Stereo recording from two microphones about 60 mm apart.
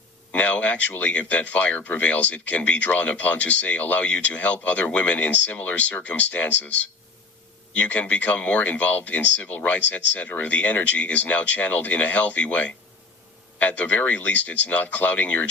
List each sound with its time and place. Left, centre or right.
0.3 s speech: left
7.8 s speech: left